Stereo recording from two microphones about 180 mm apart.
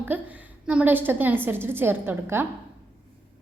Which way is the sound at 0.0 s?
10° right (ahead or behind).